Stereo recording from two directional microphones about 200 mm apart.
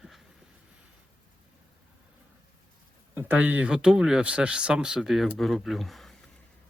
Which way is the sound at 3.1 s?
10° right (ahead or behind).